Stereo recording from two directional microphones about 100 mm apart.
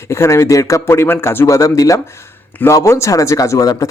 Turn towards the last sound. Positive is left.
turn(degrees=35)  # may be behind; listen again after turning